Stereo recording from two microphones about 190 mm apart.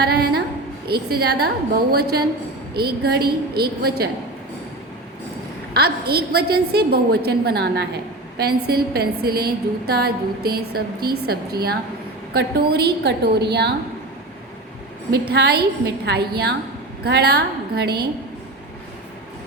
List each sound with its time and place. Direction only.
0.0 s a sound: 55° right (ahead or behind)
0.9 s a woman's voice: 55° right (ahead or behind)
5.7 s a woman's voice: 55° right (ahead or behind)
15.3 s a woman's voice: 55° right (ahead or behind)